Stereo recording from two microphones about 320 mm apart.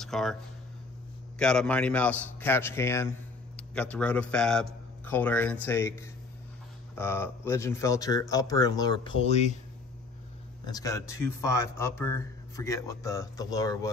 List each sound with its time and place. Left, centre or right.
0.0 s speech: centre
1.4 s a man's voice: centre; by 9.6 s left
10.6 s speech: centre